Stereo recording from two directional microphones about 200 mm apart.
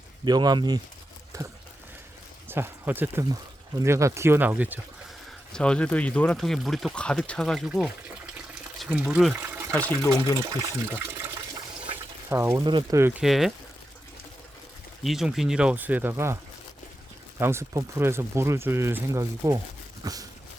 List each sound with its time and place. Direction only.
0.3 s speech: 20° right (ahead or behind)
1.3 s a sound: 15° right (ahead or behind)
2.5 s speech: 10° right (ahead or behind)
5.5 s speech: 5° left (ahead or behind)
10.4 s speech: 15° right (ahead or behind)
12.3 s speech: 10° right (ahead or behind)
15.0 s speech: centre (ahead or behind); by 20.2 s 20° right (ahead or behind)